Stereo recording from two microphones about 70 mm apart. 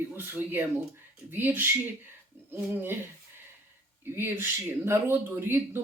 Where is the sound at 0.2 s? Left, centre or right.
Right.